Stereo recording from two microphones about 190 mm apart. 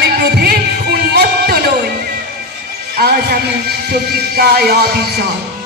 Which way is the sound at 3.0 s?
55° right (ahead or behind).